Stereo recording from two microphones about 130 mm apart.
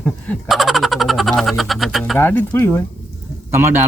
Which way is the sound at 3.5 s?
20° right (ahead or behind).